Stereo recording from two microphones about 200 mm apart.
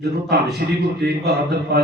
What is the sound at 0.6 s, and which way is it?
A man's voice, 50° right (ahead or behind).